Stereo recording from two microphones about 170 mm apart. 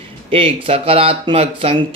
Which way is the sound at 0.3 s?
30° right (ahead or behind).